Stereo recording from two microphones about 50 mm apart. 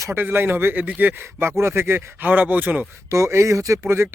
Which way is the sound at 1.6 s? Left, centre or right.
Right.